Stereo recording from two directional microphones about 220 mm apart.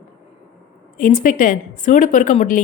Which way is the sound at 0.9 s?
35° left (ahead or behind).